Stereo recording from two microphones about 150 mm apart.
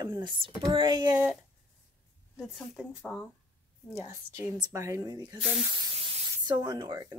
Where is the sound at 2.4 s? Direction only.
Centre (ahead or behind).